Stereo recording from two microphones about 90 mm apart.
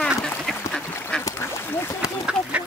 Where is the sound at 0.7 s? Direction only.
10° left (ahead or behind).